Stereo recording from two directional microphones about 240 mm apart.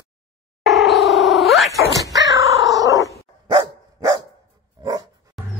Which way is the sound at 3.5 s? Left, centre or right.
Centre.